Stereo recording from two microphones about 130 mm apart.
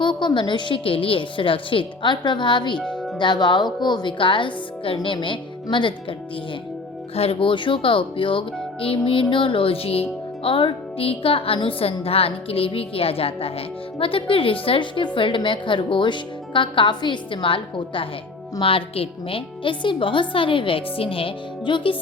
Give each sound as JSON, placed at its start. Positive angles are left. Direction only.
{"t": 0.0, "sound": "a woman's voice", "side_deg": 35}
{"t": 2.7, "sound": "music", "side_deg": 10}
{"t": 3.2, "sound": "a woman's voice", "side_deg": 35}
{"t": 7.2, "sound": "a woman's voice", "side_deg": 45}